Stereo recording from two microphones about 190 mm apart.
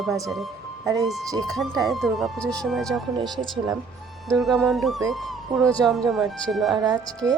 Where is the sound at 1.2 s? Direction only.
20° right (ahead or behind).